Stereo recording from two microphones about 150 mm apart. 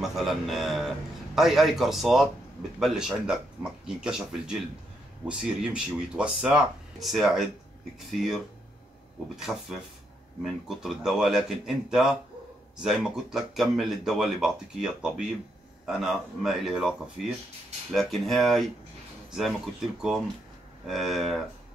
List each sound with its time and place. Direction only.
0.0 s speech: centre (ahead or behind)
9.4 s speech: centre (ahead or behind)